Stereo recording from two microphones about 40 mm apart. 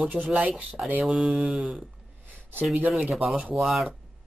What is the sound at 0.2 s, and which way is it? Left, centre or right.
Speech, centre.